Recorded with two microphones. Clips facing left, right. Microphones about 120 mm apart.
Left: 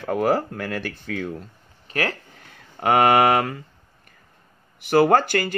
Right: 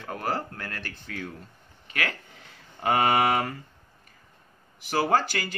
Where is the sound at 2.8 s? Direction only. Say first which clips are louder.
Left 6 dB; 85° left.